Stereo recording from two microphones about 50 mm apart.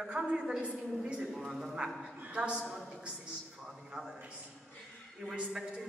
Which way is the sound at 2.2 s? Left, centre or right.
Right.